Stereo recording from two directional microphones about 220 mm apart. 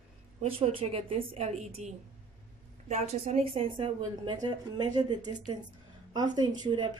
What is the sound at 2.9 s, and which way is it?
A woman's voice, 30° right (ahead or behind).